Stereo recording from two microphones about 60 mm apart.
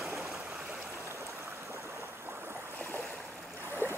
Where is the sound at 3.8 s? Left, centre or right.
Left.